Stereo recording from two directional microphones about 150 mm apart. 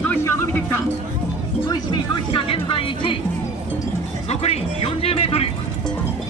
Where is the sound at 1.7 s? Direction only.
30° left (ahead or behind).